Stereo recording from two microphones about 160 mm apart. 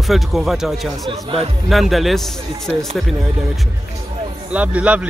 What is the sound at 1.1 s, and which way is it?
Speech, 35° right (ahead or behind).